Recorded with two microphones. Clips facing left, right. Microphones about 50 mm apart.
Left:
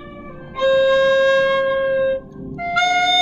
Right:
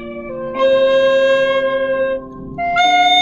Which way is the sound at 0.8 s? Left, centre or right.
Right.